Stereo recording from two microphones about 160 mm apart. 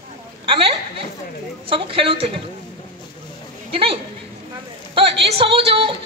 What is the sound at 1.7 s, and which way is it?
Speech, 35° right (ahead or behind).